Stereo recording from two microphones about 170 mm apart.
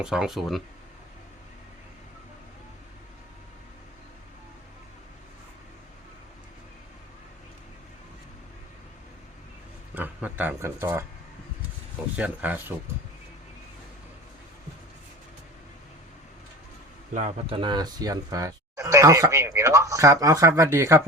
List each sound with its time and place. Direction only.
0.0 s speech: 5° right (ahead or behind)
9.9 s a sound: 10° right (ahead or behind)
12.1 s speech: 10° right (ahead or behind)
17.2 s speech: 35° right (ahead or behind); by 21.0 s 15° right (ahead or behind)